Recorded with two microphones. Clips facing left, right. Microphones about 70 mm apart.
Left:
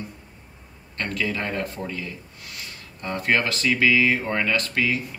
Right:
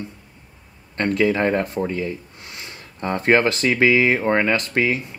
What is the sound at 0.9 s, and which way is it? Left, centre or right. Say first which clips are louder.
Speech: right 8 dB; right.